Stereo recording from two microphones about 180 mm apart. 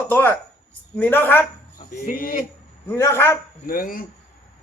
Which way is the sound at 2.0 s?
55° left (ahead or behind).